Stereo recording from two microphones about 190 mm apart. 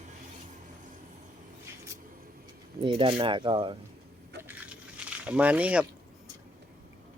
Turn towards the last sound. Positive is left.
turn(degrees=-5)  # may be behind; listen again after turning